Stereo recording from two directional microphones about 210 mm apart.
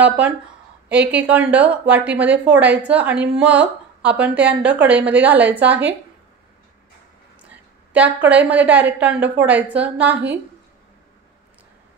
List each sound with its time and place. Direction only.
0.8 s a woman's voice: 5° right (ahead or behind)
7.9 s a woman's voice: 5° right (ahead or behind)